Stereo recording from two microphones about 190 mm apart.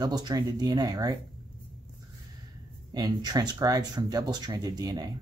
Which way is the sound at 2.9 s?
20° right (ahead or behind).